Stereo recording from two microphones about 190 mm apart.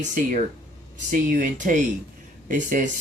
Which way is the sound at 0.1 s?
45° right (ahead or behind).